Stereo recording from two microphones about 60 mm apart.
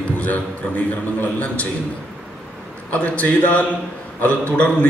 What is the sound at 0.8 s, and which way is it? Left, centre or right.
Speech, left.